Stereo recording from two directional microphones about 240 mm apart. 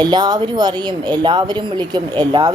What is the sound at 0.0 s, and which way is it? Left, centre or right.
A woman's voice, centre.